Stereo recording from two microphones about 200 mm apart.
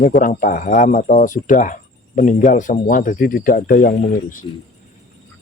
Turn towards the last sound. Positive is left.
turn(degrees=45)  # may be behind; listen again after turning